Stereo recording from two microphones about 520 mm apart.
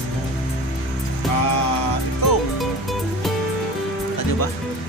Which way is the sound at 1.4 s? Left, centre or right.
Left.